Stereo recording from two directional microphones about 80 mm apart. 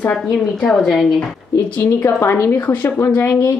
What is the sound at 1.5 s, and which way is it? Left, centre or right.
A woman's voice, left.